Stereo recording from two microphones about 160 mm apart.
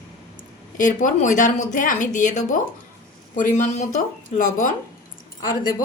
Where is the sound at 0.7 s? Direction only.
55° left (ahead or behind).